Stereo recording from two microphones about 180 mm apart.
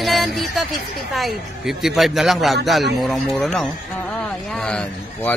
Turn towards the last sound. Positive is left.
turn(degrees=5)  # may be behind; listen again after turning